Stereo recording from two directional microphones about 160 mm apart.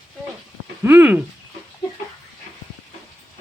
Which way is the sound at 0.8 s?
10° right (ahead or behind).